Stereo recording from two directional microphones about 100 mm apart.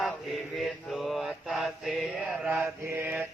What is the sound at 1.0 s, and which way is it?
Mantra, centre (ahead or behind).